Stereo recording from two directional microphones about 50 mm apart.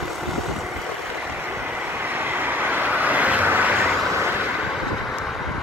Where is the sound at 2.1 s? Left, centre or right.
Right.